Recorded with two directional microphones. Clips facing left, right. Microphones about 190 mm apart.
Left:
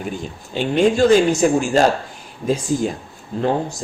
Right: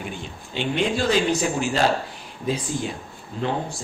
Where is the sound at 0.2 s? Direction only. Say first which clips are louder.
Left 5 dB; 40° left (ahead or behind).